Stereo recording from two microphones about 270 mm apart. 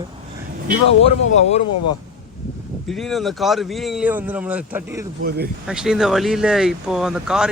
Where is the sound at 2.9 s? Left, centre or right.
Centre.